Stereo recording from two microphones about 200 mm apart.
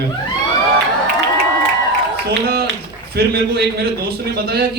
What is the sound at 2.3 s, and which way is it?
A man's voice, 55° right (ahead or behind).